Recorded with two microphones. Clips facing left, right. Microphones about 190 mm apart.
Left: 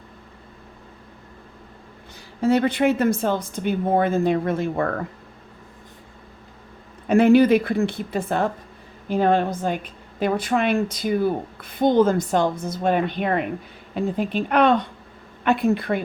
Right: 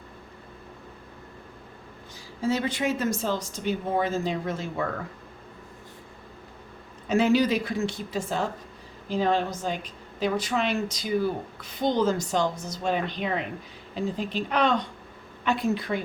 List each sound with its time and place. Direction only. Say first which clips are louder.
2.4 s a woman's voice: left 8 dB; 60° left (ahead or behind)
7.1 s a woman's voice: left 7 dB; 55° left (ahead or behind)